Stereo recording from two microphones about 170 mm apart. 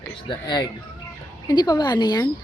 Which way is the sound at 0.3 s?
25° left (ahead or behind).